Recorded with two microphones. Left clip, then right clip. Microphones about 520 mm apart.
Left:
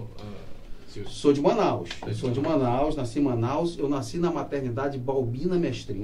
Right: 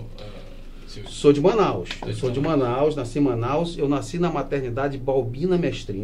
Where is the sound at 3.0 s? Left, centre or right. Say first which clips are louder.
Right 3 dB; right.